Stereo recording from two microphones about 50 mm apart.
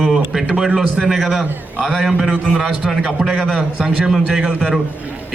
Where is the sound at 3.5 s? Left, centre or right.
Centre.